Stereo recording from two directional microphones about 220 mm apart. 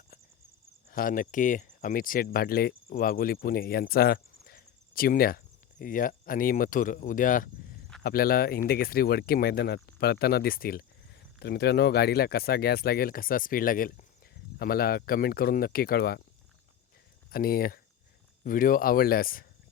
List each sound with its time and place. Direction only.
0.9 s speech: 40° left (ahead or behind)
17.3 s speech: 40° left (ahead or behind)